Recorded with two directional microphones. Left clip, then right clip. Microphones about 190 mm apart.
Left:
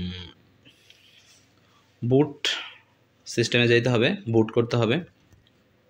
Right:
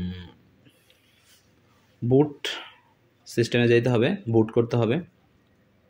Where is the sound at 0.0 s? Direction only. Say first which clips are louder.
Left 2 dB; 20° right (ahead or behind).